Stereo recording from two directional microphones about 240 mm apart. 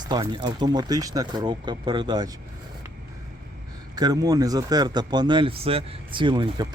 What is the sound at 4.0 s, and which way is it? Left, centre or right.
Speech, centre.